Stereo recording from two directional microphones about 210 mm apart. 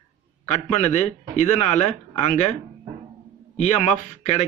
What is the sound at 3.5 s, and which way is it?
Speech, 35° left (ahead or behind).